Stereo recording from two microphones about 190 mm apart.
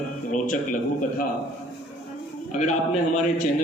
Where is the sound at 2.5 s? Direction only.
40° left (ahead or behind).